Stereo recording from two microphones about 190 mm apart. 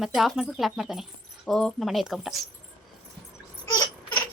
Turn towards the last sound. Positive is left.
turn(degrees=20)  # may be behind; listen again after turning